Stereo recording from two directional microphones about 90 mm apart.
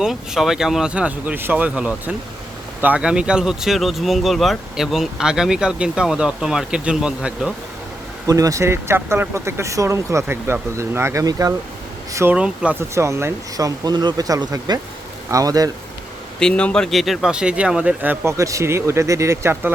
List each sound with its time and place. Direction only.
0.0 s speech: 5° right (ahead or behind)
8.3 s speech: 40° right (ahead or behind)
12.3 s speech: 15° right (ahead or behind)
12.9 s speech: 30° right (ahead or behind)
13.6 s speech: 45° right (ahead or behind)
16.4 s speech: 10° left (ahead or behind); by 18.3 s 20° right (ahead or behind)
18.3 s speech: 35° right (ahead or behind)